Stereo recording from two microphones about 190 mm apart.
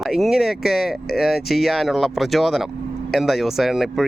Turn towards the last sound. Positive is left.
turn(degrees=0)  # may be behind; listen again after turning